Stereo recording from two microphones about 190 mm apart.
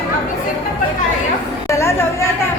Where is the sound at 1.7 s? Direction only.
15° left (ahead or behind).